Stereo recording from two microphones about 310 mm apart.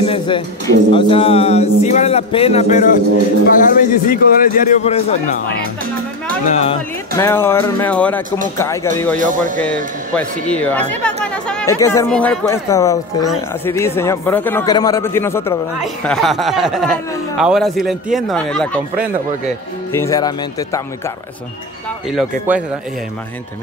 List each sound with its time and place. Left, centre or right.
0.0 s music: centre
6.4 s music: left
7.2 s speech: centre
10.5 s speech: centre
19.9 s speech: centre